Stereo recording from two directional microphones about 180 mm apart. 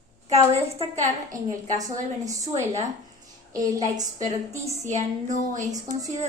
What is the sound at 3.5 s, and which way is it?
Speech, 20° right (ahead or behind).